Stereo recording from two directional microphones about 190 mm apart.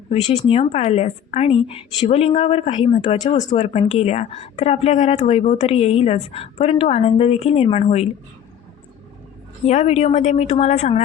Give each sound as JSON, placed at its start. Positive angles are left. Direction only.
{"t": 0.1, "sound": "a woman's voice", "side_deg": 35}
{"t": 9.6, "sound": "a woman's voice", "side_deg": 35}